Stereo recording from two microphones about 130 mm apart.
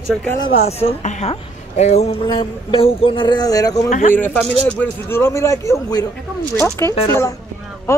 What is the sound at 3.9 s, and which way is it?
Speech, 85° left.